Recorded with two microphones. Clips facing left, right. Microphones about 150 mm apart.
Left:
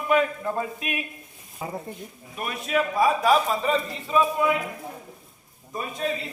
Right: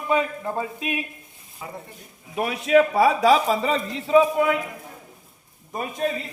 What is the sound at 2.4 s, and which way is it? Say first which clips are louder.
Speech: right 8 dB; 80° right.